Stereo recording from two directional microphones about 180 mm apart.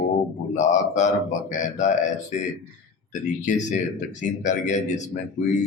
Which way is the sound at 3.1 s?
45° left (ahead or behind).